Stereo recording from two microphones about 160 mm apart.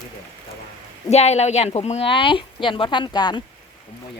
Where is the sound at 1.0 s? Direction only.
40° left (ahead or behind); by 3.4 s 25° left (ahead or behind).